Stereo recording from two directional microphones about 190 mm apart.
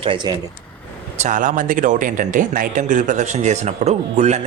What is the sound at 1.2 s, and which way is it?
Speech, 45° right (ahead or behind).